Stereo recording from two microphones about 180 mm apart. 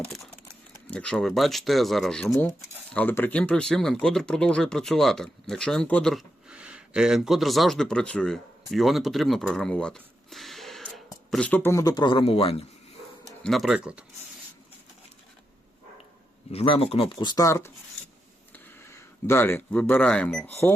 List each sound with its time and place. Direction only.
0.9 s speech: 5° left (ahead or behind); by 12.6 s 35° left (ahead or behind)
13.4 s speech: centre (ahead or behind)
16.5 s speech: 35° left (ahead or behind); by 20.7 s 10° left (ahead or behind)